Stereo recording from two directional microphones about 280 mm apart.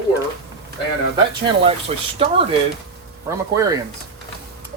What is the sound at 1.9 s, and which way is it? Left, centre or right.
Speech, right.